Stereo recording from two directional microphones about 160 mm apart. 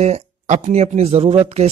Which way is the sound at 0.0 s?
45° right (ahead or behind).